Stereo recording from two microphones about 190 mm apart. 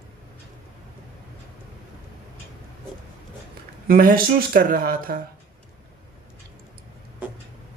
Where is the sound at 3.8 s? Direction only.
50° right (ahead or behind).